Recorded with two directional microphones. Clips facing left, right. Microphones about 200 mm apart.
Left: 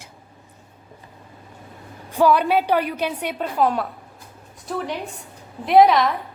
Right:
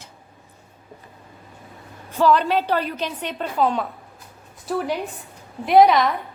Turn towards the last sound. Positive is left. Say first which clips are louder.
# even
turn(degrees=0)  # may be behind; listen again after turning